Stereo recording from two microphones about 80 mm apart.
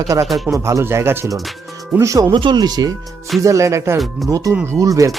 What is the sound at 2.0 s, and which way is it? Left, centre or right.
Speech, right.